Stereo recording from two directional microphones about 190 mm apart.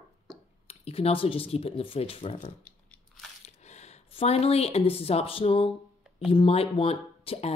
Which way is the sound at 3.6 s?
35° left (ahead or behind).